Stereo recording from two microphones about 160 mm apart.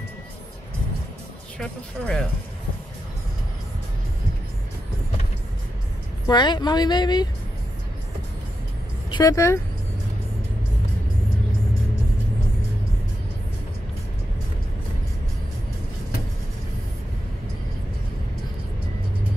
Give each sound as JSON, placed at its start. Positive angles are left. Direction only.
{"t": 1.6, "sound": "speech", "side_deg": 5}
{"t": 6.2, "sound": "speech", "side_deg": 30}
{"t": 9.1, "sound": "speech", "side_deg": 20}